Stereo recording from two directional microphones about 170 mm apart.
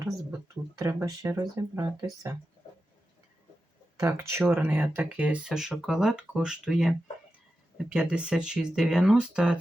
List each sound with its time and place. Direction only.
0.8 s speech: 20° right (ahead or behind)
4.0 s speech: 15° right (ahead or behind)